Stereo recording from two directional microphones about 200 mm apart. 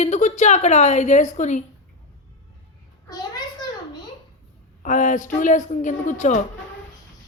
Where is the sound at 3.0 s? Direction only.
20° left (ahead or behind).